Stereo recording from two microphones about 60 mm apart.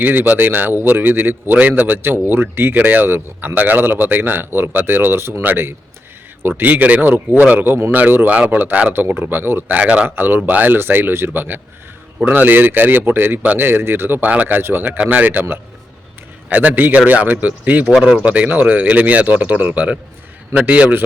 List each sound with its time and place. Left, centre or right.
0.0 s a man's voice: right
2.7 s a man's voice: right
10.2 s a man's voice: right
17.9 s speech: centre
18.2 s speech: right